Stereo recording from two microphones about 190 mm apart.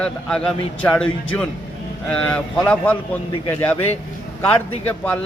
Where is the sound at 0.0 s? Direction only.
5° left (ahead or behind).